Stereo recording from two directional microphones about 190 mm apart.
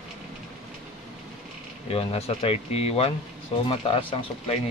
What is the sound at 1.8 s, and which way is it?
A man's voice, 30° left (ahead or behind).